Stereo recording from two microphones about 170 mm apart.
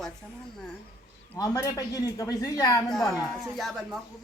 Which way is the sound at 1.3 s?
20° left (ahead or behind).